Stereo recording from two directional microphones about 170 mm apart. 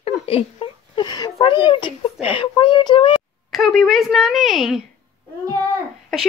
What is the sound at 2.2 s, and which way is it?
Speech, 30° left (ahead or behind).